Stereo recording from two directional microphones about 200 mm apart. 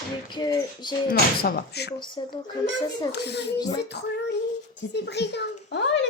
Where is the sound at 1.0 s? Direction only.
50° left (ahead or behind).